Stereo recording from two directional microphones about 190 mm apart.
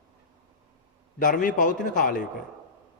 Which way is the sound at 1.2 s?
45° left (ahead or behind).